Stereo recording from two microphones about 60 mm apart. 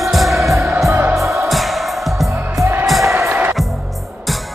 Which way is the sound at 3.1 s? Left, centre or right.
Right.